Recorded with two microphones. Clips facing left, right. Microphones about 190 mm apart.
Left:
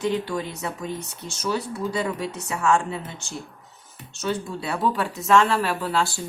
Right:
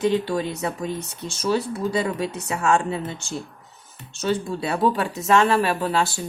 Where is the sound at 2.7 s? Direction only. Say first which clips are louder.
Right 2 dB; 30° right (ahead or behind).